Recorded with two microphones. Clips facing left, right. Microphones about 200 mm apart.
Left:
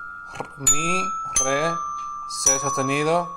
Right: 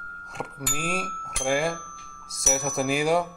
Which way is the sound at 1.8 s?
25° right (ahead or behind).